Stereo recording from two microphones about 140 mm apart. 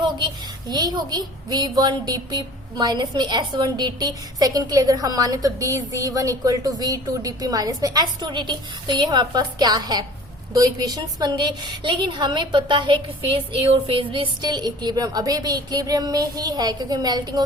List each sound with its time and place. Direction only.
0.7 s a woman's voice: 30° right (ahead or behind)